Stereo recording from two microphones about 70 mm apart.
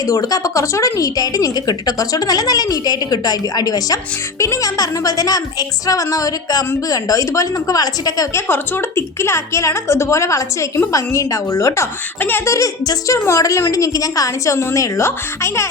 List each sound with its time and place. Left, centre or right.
0.0 s a woman's voice: left
8.3 s a woman's voice: left